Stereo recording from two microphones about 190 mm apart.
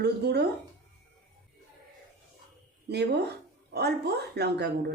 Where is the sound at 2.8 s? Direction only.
60° right (ahead or behind).